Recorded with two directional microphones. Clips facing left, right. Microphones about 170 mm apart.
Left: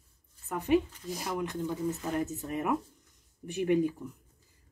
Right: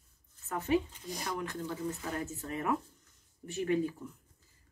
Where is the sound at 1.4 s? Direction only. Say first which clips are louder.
Left 4 dB; 15° left (ahead or behind).